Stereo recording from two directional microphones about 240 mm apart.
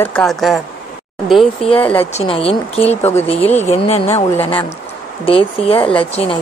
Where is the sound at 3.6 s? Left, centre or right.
Left.